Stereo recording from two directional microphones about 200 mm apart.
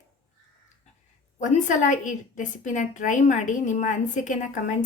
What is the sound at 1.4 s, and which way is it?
A woman's voice, 40° left (ahead or behind).